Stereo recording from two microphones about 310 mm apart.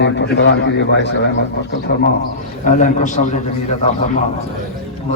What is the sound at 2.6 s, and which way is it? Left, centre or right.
Speech, left.